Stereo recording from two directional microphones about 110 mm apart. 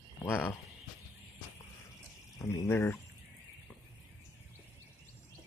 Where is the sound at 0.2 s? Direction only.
20° left (ahead or behind).